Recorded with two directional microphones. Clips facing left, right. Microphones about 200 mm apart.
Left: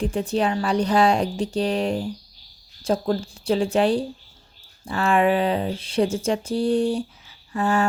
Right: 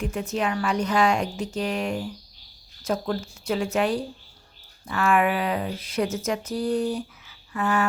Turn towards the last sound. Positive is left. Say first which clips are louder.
# left 3 dB
turn(degrees=30)  # may be behind; listen again after turning